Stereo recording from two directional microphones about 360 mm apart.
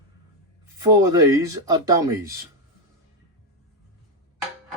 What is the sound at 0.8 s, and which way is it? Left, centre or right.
Speech, centre.